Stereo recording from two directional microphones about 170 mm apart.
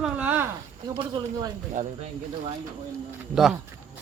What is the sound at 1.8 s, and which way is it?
Speech, 45° right (ahead or behind).